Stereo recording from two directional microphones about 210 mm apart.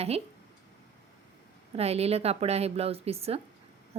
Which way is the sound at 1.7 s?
30° right (ahead or behind).